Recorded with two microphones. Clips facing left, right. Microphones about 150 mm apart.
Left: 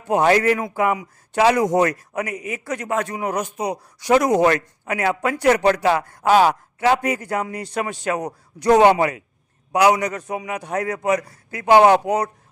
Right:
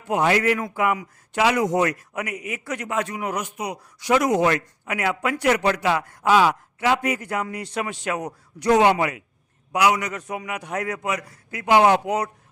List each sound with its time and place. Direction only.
0.1 s a man's voice: 35° left (ahead or behind)